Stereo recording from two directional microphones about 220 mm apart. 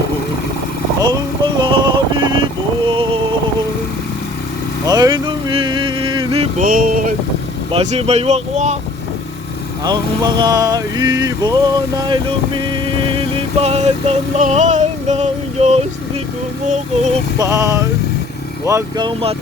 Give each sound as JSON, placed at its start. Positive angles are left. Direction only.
{"t": 0.9, "sound": "vehicle", "side_deg": -20}
{"t": 4.9, "sound": "vehicle", "side_deg": -15}
{"t": 6.6, "sound": "a sound", "side_deg": -40}
{"t": 7.7, "sound": "speech", "side_deg": -25}
{"t": 9.8, "sound": "music", "side_deg": -20}
{"t": 12.7, "sound": "vehicle", "side_deg": -25}
{"t": 17.3, "sound": "music", "side_deg": -15}
{"t": 18.6, "sound": "speech", "side_deg": -15}